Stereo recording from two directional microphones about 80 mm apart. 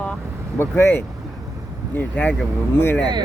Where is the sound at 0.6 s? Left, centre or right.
Left.